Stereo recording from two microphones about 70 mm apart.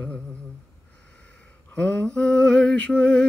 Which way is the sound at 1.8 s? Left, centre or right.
Centre.